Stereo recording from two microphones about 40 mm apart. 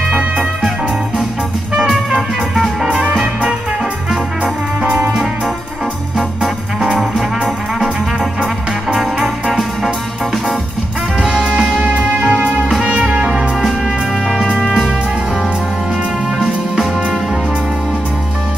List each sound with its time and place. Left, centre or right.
0.1 s music: right
2.5 s music: centre
2.9 s music: centre
6.1 s organ: centre
7.0 s trombone: centre
8.9 s music: centre
11.8 s music: right